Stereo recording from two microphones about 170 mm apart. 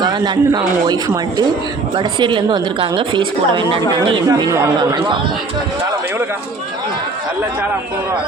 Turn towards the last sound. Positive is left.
turn(degrees=-10)  # may be behind; listen again after turning